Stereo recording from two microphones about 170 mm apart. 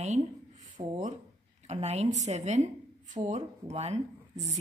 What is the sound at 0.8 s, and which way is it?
Speech, 30° right (ahead or behind).